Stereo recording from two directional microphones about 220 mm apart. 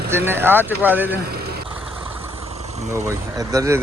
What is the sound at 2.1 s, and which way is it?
Vehicle, 10° right (ahead or behind).